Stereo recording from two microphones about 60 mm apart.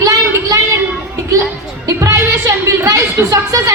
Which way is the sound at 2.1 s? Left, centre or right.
Right.